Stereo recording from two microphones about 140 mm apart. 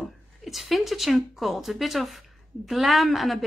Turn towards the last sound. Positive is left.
turn(degrees=0)  # may be behind; listen again after turning